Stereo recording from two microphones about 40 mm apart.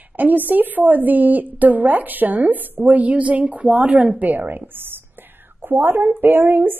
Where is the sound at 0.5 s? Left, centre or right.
Right.